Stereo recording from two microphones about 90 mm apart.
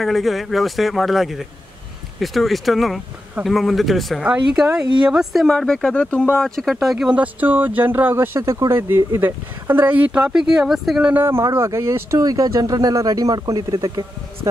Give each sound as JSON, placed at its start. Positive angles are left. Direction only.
{"t": 0.0, "sound": "speech", "side_deg": 0}
{"t": 4.2, "sound": "speech", "side_deg": -15}
{"t": 8.4, "sound": "speech", "side_deg": -35}
{"t": 11.1, "sound": "speech", "side_deg": -25}
{"t": 12.2, "sound": "speech", "side_deg": -45}